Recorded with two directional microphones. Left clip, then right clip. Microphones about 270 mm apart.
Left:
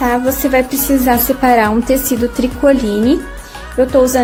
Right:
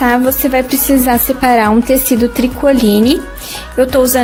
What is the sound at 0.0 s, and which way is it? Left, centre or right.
A woman's voice, right.